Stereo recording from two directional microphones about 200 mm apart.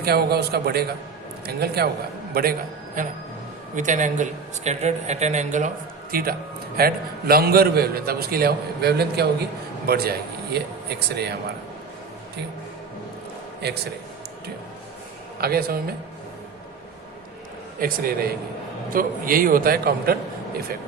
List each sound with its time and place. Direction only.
0.0 s a man's voice: 50° right (ahead or behind)
15.4 s a man's voice: 50° right (ahead or behind)
17.7 s a man's voice: 45° right (ahead or behind)